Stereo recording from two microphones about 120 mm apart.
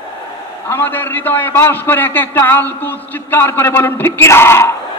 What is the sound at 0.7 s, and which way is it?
A man's voice, 15° left (ahead or behind).